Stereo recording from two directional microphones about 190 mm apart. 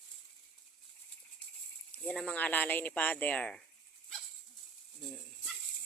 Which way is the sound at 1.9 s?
5° left (ahead or behind).